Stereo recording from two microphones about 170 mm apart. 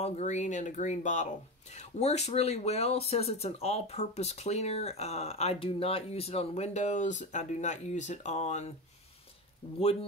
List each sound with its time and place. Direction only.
0.0 s speech: 45° left (ahead or behind)